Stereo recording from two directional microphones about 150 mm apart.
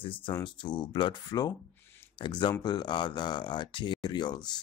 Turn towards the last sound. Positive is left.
turn(degrees=30)  # may be behind; listen again after turning